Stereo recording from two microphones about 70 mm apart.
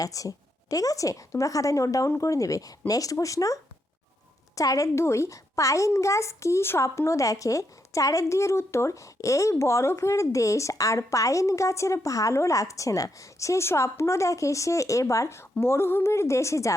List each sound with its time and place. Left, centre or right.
0.0 s a woman's voice: left